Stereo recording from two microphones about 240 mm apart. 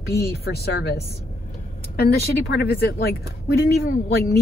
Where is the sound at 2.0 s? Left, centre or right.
Left.